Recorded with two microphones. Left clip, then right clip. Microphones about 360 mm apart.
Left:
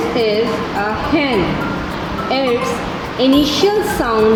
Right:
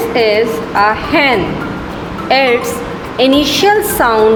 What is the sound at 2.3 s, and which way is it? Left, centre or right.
A woman's voice, right.